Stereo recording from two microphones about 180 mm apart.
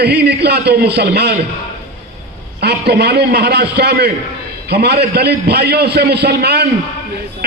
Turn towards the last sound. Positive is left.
turn(degrees=-65)  # may be behind; listen again after turning